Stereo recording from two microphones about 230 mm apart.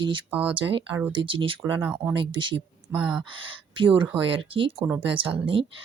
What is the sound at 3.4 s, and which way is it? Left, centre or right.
Speech, right.